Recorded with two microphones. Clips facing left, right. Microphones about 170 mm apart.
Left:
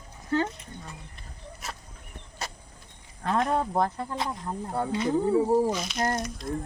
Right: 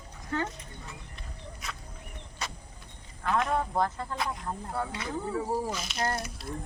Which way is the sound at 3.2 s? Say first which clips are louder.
Left 2 dB; 30° left (ahead or behind).